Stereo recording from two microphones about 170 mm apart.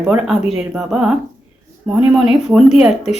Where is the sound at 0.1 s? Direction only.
5° right (ahead or behind).